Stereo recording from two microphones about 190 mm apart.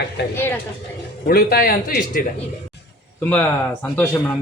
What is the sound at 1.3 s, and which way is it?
Speech, 55° left (ahead or behind).